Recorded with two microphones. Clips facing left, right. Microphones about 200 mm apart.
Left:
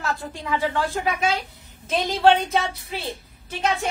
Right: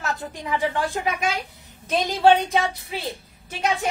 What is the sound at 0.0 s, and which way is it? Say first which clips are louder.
A woman's voice: left 1 dB; 20° right (ahead or behind).